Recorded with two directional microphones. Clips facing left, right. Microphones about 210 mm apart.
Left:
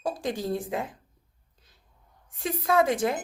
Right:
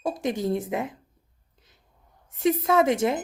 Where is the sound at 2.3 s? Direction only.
20° right (ahead or behind).